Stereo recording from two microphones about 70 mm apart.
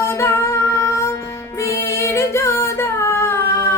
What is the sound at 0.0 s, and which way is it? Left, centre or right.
Music, left.